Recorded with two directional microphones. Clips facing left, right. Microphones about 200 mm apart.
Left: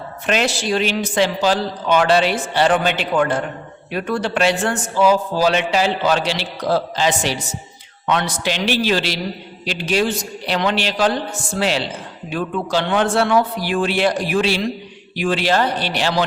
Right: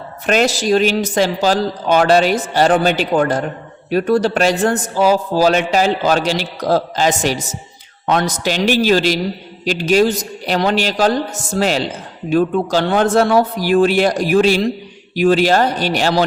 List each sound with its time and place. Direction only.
0.3 s a man's voice: 40° right (ahead or behind)